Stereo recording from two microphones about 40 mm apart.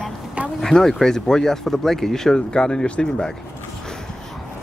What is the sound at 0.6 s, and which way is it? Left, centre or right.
Speech, centre.